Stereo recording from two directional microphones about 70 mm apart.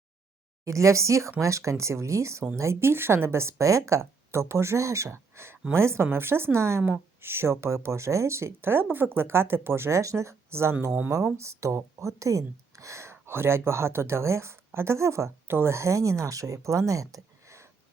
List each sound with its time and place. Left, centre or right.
0.6 s speech: right